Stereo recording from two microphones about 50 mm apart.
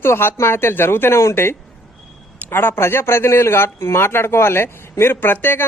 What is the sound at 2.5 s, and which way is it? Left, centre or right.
A man's voice, left.